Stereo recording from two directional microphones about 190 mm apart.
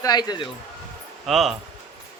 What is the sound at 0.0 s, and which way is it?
Speech, 20° left (ahead or behind).